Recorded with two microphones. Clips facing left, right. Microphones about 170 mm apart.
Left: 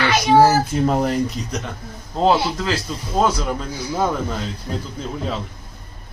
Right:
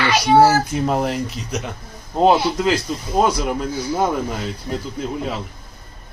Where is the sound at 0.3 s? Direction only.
5° right (ahead or behind).